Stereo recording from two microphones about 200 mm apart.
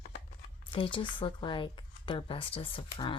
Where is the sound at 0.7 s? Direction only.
25° left (ahead or behind).